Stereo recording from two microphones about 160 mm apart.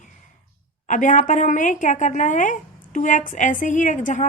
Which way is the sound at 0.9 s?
50° left (ahead or behind).